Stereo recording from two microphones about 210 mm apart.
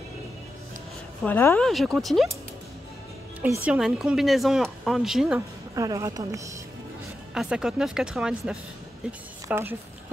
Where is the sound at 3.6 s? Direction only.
Centre (ahead or behind).